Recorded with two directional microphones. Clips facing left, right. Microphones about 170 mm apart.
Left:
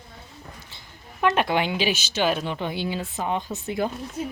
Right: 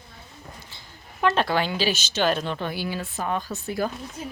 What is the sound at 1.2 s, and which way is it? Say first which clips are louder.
Speech: left 1 dB; 20° left (ahead or behind).